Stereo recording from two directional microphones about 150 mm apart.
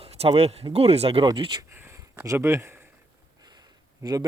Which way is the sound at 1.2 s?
30° right (ahead or behind).